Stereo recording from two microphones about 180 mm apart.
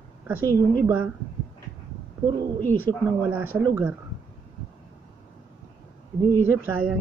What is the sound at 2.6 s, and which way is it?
Speech, 10° left (ahead or behind).